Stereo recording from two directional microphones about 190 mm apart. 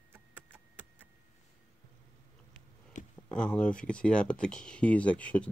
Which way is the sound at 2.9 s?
40° left (ahead or behind).